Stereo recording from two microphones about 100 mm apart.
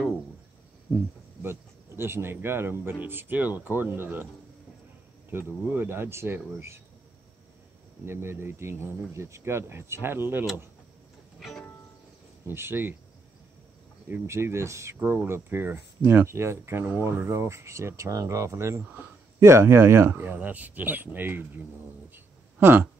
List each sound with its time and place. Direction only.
1.4 s speech: 25° right (ahead or behind)
5.3 s speech: 20° right (ahead or behind)
8.0 s speech: 25° right (ahead or behind)
11.3 s music: centre (ahead or behind)
12.4 s speech: 25° right (ahead or behind)
14.2 s speech: 30° right (ahead or behind)
22.1 s a sound: 20° right (ahead or behind)